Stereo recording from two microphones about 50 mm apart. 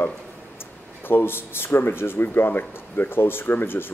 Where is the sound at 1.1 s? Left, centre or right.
Left.